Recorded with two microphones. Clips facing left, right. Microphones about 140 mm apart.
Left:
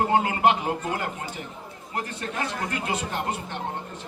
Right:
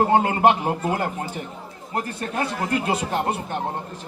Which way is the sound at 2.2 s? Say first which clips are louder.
Right 4 dB; 35° right (ahead or behind).